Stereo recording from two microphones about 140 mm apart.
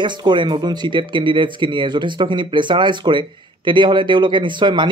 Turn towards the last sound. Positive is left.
turn(degrees=-35)  # may be behind; listen again after turning